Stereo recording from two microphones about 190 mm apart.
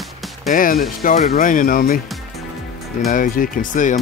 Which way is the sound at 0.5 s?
45° left (ahead or behind).